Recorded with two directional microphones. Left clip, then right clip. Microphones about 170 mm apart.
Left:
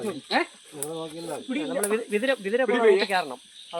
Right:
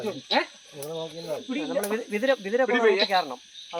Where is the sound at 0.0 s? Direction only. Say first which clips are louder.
Even; 25° left (ahead or behind).